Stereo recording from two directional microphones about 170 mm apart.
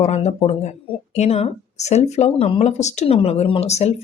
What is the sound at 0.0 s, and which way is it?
Speech, 40° left (ahead or behind).